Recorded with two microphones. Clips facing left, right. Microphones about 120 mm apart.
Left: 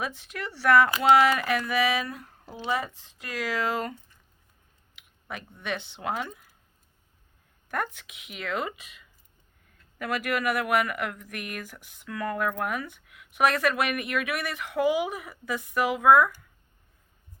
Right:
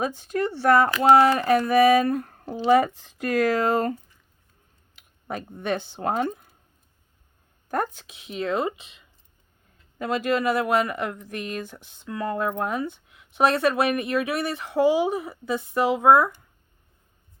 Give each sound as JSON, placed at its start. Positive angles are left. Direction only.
{"t": 0.0, "sound": "speech", "side_deg": -35}
{"t": 7.7, "sound": "speech", "side_deg": -35}